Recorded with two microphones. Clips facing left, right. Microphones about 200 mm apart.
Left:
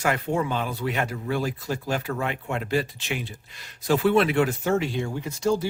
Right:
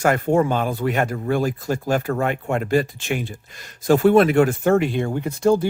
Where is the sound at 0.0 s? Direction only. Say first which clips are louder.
Right 7 dB; 50° right (ahead or behind).